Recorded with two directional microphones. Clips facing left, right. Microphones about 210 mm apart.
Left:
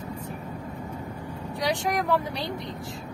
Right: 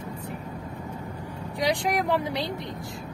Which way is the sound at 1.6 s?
15° right (ahead or behind).